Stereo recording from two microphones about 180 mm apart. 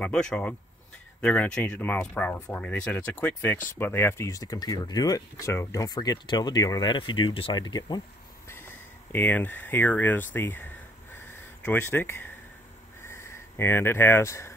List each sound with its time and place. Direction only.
0.0 s speech: 5° left (ahead or behind); by 8.0 s 25° left (ahead or behind)
9.1 s speech: 10° left (ahead or behind)